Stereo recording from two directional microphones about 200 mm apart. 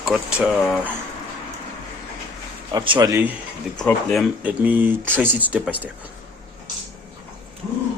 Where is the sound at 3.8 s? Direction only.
5° left (ahead or behind).